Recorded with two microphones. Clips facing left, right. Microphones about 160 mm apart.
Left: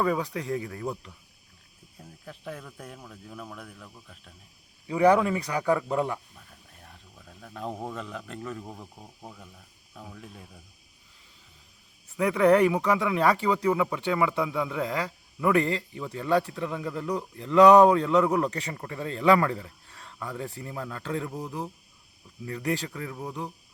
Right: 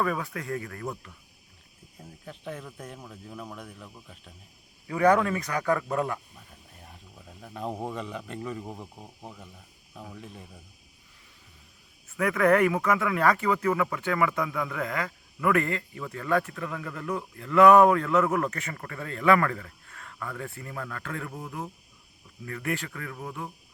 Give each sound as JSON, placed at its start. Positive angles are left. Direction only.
{"t": 0.0, "sound": "speech", "side_deg": 20}
{"t": 2.0, "sound": "speech", "side_deg": 0}
{"t": 4.9, "sound": "speech", "side_deg": 15}
{"t": 6.3, "sound": "speech", "side_deg": -5}
{"t": 12.2, "sound": "speech", "side_deg": 25}
{"t": 13.6, "sound": "speech", "side_deg": 15}
{"t": 19.4, "sound": "a sound", "side_deg": 25}
{"t": 20.1, "sound": "speech", "side_deg": 20}